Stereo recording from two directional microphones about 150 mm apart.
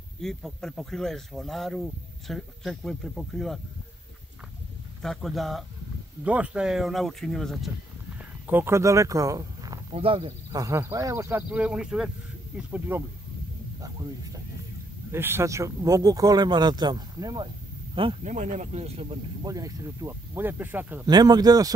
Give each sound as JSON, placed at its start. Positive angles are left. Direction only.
{"t": 0.2, "sound": "speech", "side_deg": 5}
{"t": 5.0, "sound": "speech", "side_deg": 0}
{"t": 8.5, "sound": "speech", "side_deg": -15}
{"t": 9.9, "sound": "speech", "side_deg": -35}
{"t": 13.7, "sound": "a sound", "side_deg": -25}
{"t": 15.0, "sound": "speech", "side_deg": -15}
{"t": 18.2, "sound": "speech", "side_deg": -55}
{"t": 19.4, "sound": "speech", "side_deg": -25}
{"t": 21.0, "sound": "speech", "side_deg": -25}